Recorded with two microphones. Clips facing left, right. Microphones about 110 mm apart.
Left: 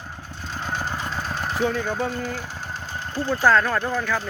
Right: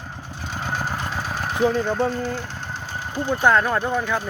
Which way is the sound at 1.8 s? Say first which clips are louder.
Right 4 dB; centre (ahead or behind).